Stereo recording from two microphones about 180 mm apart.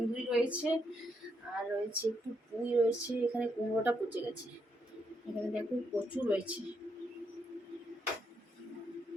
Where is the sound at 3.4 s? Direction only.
10° right (ahead or behind).